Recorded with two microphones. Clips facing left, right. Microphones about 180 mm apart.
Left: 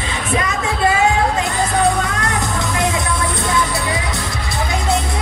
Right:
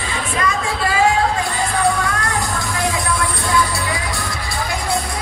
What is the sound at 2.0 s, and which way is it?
Music, 20° left (ahead or behind).